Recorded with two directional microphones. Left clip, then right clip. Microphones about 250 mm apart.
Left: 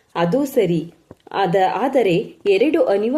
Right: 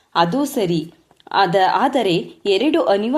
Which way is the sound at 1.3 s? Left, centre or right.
Centre.